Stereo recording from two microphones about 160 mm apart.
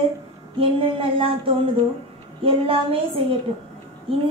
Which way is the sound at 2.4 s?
35° right (ahead or behind).